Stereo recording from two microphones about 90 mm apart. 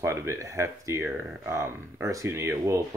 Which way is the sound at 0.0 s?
30° right (ahead or behind).